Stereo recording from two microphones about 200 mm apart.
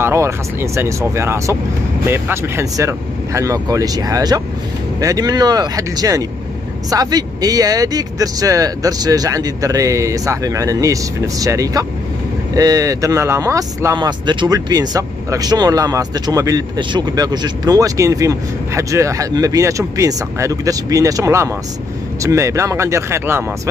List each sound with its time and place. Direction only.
0.0 s speech: 15° right (ahead or behind)